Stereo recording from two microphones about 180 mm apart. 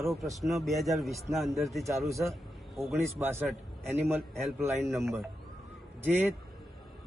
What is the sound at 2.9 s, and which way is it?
A man's voice, 10° right (ahead or behind).